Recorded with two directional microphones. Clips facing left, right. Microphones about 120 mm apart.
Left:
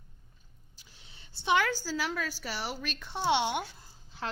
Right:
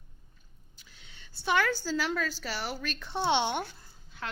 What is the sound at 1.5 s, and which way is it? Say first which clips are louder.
A woman's voice: right 1 dB; 10° left (ahead or behind).